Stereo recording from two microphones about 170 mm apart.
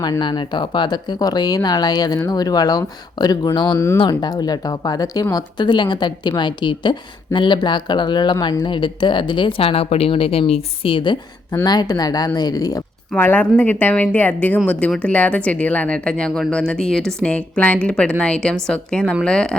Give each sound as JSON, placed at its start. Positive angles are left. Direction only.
{"t": 0.0, "sound": "speech", "side_deg": 25}
{"t": 13.1, "sound": "a woman's voice", "side_deg": 10}